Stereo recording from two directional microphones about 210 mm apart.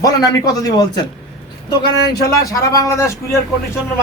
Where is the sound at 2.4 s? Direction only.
15° left (ahead or behind).